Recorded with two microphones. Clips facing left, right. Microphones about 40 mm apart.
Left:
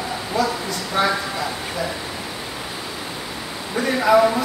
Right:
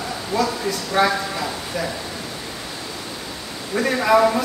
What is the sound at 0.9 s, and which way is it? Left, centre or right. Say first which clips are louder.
Speech: right 2 dB; centre.